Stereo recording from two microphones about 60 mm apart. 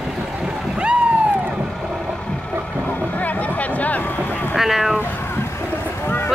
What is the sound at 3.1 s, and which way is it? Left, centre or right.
Music, left.